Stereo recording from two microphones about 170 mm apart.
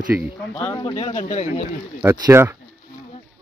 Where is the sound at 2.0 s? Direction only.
15° right (ahead or behind).